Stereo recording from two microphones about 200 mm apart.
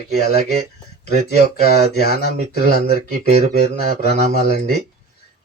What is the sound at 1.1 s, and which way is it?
A man's voice, 30° right (ahead or behind).